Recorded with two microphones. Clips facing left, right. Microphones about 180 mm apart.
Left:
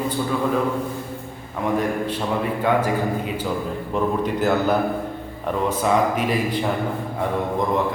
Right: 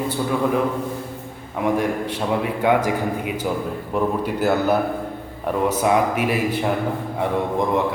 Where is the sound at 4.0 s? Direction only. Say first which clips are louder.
Even; 10° right (ahead or behind).